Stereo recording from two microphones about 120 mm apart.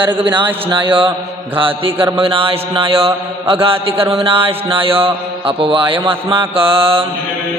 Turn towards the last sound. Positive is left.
turn(degrees=-45)  # may be behind; listen again after turning